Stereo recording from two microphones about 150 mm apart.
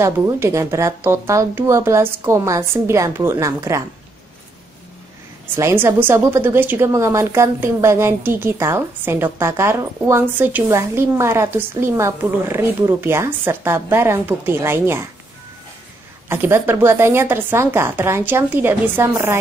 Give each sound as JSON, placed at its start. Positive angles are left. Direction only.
{"t": 0.0, "sound": "speech", "side_deg": -20}
{"t": 5.6, "sound": "a woman's voice", "side_deg": -15}
{"t": 16.3, "sound": "a woman's voice", "side_deg": -15}